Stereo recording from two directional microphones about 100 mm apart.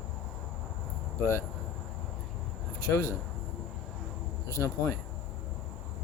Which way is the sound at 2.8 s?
35° left (ahead or behind).